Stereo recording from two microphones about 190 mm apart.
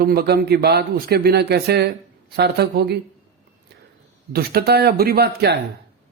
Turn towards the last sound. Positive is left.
turn(degrees=-60)  # may be behind; listen again after turning